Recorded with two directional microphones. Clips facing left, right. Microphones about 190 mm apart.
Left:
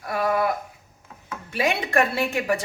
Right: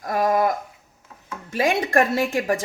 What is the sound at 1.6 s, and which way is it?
Speech, 45° right (ahead or behind).